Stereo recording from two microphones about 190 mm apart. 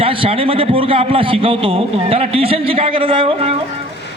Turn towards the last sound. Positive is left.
turn(degrees=-30)  # may be behind; listen again after turning